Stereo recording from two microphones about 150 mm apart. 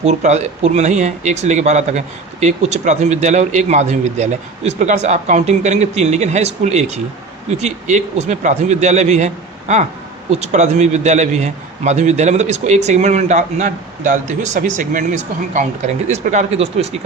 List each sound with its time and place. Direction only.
0.0 s speech: 50° right (ahead or behind)